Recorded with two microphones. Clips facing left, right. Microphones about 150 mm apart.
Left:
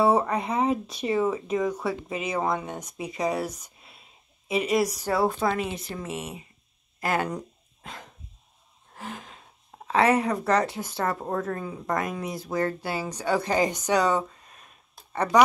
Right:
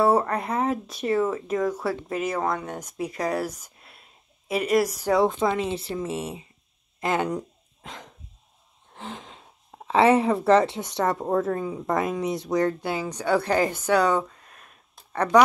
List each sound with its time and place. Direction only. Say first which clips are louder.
0.0 s a sound: right 1 dB; centre (ahead or behind)
0.7 s speech: right 1 dB; centre (ahead or behind)
3.6 s a sound: right 1 dB; centre (ahead or behind)
4.5 s speech: right 2 dB; centre (ahead or behind)
5.4 s speech: right 2 dB; 25° right (ahead or behind)
7.2 s a sound: right 4 dB; 15° right (ahead or behind)
8.9 s gasp: right 1 dB; 25° right (ahead or behind)
9.9 s speech: right 3 dB; 25° right (ahead or behind)
10.6 s speech: right 3 dB; centre (ahead or behind)
12.0 s speech: right 5 dB; 25° right (ahead or behind)
12.4 s a woman's voice: right 1 dB; 5° left (ahead or behind)